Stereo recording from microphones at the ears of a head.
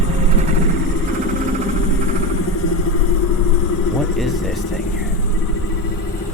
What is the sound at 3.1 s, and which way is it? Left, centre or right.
Vehicle, left.